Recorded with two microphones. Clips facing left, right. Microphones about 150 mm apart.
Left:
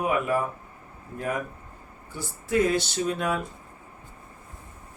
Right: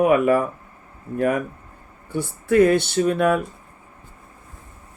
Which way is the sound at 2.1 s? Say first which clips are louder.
Right 8 dB; 60° right (ahead or behind).